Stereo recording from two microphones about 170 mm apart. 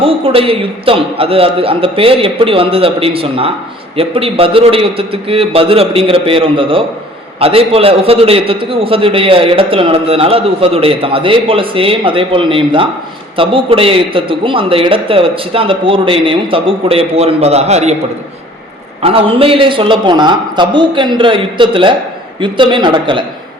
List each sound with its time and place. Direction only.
0.0 s a man's voice: 35° right (ahead or behind)
19.0 s a man's voice: 35° right (ahead or behind)